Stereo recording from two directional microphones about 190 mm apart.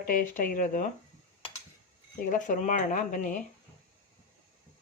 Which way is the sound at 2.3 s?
40° left (ahead or behind).